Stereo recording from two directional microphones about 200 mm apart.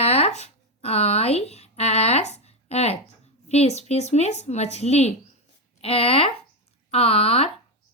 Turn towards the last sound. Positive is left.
turn(degrees=30)  # may be behind; listen again after turning